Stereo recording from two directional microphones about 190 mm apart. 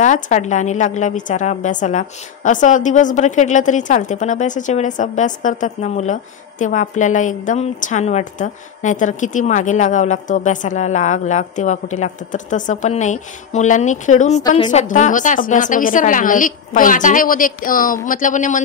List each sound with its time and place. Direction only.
0.0 s a woman's voice: 40° left (ahead or behind)